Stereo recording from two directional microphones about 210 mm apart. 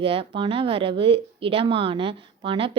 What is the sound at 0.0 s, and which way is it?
Speech, 25° right (ahead or behind).